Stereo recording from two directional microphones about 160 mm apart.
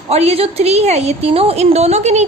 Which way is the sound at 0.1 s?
40° right (ahead or behind).